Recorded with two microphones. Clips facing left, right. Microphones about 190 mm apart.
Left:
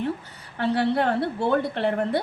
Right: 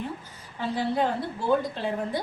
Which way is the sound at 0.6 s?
65° left (ahead or behind).